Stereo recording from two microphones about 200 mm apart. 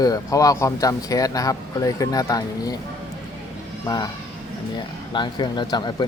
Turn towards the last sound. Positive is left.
turn(degrees=20)  # may be behind; listen again after turning